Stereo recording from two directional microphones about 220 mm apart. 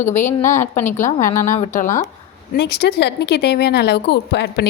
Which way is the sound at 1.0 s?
35° left (ahead or behind).